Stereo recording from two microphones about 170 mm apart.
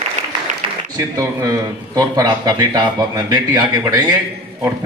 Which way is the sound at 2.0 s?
20° right (ahead or behind).